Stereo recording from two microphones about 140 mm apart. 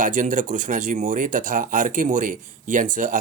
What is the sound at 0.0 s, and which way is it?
A man's voice, 70° right (ahead or behind).